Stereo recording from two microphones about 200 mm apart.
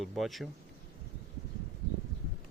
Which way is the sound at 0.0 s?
Centre (ahead or behind).